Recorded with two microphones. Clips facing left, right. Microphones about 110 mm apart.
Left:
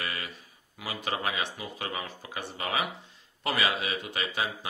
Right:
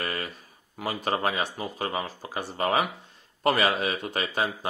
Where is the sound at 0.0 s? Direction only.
45° right (ahead or behind).